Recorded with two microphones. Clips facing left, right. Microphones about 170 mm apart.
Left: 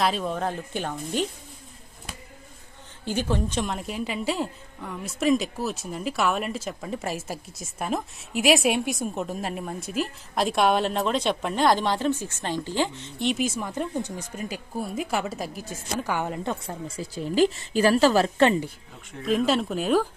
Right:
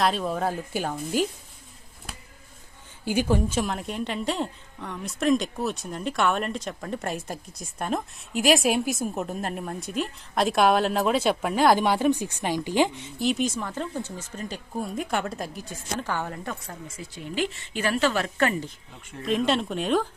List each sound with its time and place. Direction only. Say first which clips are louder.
0.0 s a woman's voice: right 1 dB; centre (ahead or behind)
3.0 s a woman's voice: right 3 dB; 10° right (ahead or behind)
16.0 s a woman's voice: left 3 dB; 15° left (ahead or behind)
19.2 s a woman's voice: left 1 dB; centre (ahead or behind)